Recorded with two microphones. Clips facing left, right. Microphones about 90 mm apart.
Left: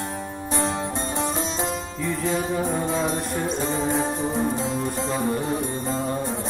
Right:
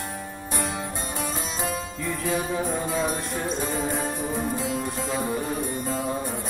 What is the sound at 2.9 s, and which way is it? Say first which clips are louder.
Music: left 2 dB; 25° left (ahead or behind).